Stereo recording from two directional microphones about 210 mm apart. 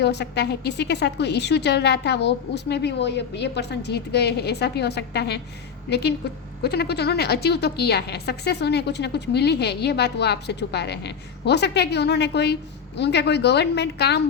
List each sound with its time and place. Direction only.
0.0 s a woman's voice: 55° left (ahead or behind)